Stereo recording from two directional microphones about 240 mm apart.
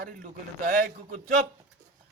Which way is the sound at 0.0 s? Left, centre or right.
Right.